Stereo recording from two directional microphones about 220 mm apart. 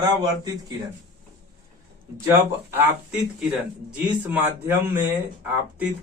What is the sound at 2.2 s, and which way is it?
A man's voice, 10° right (ahead or behind).